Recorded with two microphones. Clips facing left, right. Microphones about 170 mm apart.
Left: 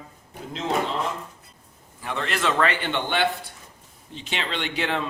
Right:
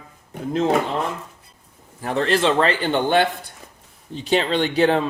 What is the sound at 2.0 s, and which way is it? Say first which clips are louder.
Speech: right 7 dB; 35° right (ahead or behind).